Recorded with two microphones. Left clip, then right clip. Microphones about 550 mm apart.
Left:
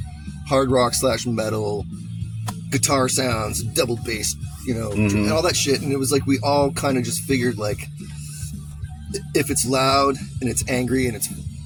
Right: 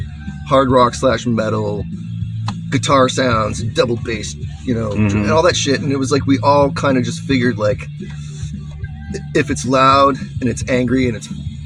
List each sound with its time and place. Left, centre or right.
0.5 s speech: left
2.7 s speech: left
4.9 s speech: left
5.2 s speech: left
9.3 s speech: left